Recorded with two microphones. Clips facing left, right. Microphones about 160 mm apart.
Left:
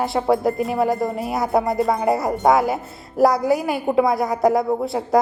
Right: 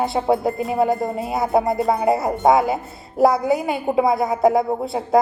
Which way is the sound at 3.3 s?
20° right (ahead or behind).